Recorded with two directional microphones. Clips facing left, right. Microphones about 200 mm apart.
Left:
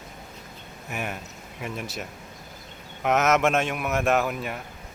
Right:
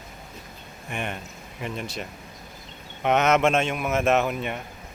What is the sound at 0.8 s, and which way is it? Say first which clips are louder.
A man's voice: right 1 dB; 5° left (ahead or behind).